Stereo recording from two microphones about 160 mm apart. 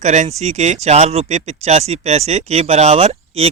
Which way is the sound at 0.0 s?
45° right (ahead or behind).